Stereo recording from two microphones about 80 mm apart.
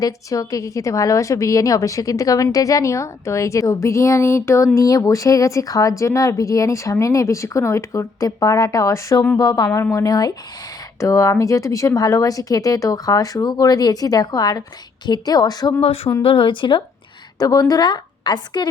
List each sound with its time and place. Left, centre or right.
0.0 s a woman's voice: left
9.4 s a woman's voice: left
9.6 s a woman's voice: left
15.7 s speech: left
16.2 s speech: left
17.4 s speech: left